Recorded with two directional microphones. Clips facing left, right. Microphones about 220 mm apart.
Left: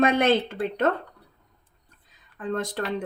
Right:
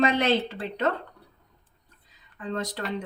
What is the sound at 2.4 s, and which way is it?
Speech, 50° left (ahead or behind).